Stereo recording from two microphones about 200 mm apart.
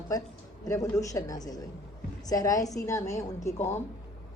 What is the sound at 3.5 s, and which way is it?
Speech, 35° left (ahead or behind).